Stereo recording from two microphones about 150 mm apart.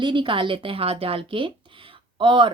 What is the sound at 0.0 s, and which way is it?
Speech, 30° right (ahead or behind).